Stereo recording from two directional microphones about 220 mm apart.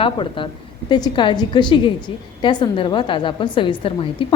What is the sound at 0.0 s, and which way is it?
A woman's voice, 20° left (ahead or behind).